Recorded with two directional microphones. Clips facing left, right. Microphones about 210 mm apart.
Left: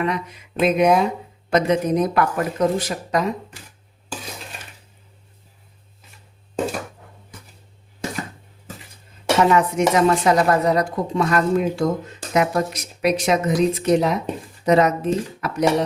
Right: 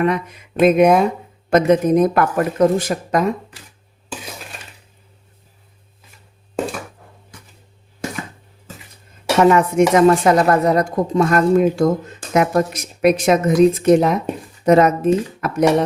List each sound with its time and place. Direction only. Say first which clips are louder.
0.0 s speech: right 5 dB; 50° right (ahead or behind)
9.4 s speech: right 5 dB; 50° right (ahead or behind)